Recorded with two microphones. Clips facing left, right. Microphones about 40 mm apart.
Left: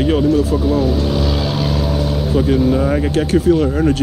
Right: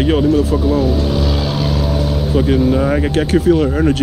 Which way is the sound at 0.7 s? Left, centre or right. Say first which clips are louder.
Right 1 dB; centre.